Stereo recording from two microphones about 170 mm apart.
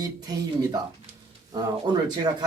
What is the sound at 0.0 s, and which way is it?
Speech, 25° right (ahead or behind).